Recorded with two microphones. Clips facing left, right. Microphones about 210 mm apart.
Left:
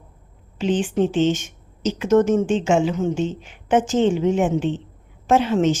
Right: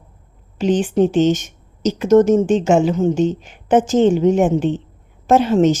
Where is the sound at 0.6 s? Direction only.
40° right (ahead or behind).